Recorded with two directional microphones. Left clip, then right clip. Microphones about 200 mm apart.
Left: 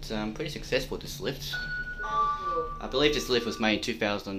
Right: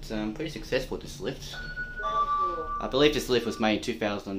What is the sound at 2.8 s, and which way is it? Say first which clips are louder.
Speech: right 4 dB; 25° right (ahead or behind).